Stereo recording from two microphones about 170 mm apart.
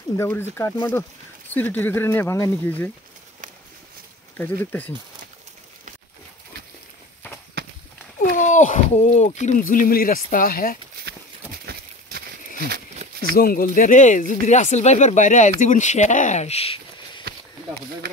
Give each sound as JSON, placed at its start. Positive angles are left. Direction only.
{"t": 0.2, "sound": "speech", "side_deg": 15}
{"t": 4.4, "sound": "speech", "side_deg": 10}
{"t": 7.6, "sound": "run", "side_deg": -70}
{"t": 8.2, "sound": "speech", "side_deg": 45}
{"t": 11.7, "sound": "a sound", "side_deg": -65}
{"t": 13.2, "sound": "speech", "side_deg": 60}
{"t": 18.0, "sound": "speech", "side_deg": -65}